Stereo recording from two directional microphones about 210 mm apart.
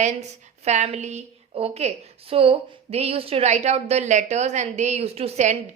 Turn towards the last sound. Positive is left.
turn(degrees=-35)  # may be behind; listen again after turning